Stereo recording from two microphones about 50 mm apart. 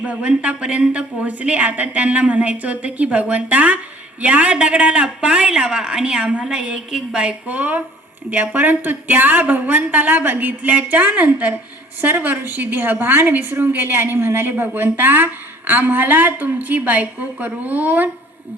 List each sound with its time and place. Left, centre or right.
0.0 s a woman's voice: right
14.6 s a woman's voice: right